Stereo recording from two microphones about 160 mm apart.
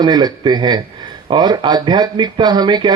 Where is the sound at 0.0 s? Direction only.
25° right (ahead or behind).